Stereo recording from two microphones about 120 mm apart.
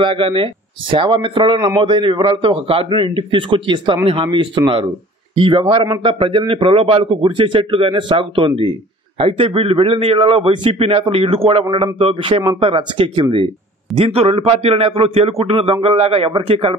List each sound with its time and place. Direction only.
0.0 s a man's voice: 45° right (ahead or behind)